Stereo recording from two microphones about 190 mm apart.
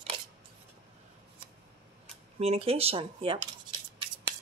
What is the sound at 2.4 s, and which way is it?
Speech, 30° right (ahead or behind).